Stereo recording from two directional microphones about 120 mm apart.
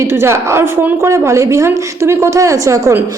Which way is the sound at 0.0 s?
20° right (ahead or behind).